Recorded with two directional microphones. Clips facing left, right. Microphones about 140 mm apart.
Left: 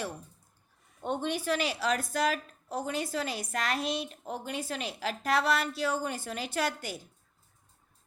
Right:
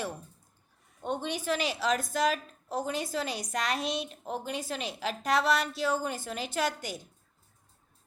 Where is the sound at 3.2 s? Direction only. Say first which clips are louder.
Right 1 dB; 25° right (ahead or behind).